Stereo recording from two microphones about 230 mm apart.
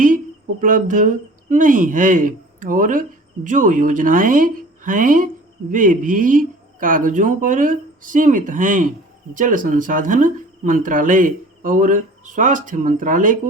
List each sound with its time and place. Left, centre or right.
0.6 s speech: right